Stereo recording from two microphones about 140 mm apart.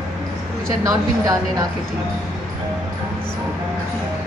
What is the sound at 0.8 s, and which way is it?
Speech, 25° right (ahead or behind).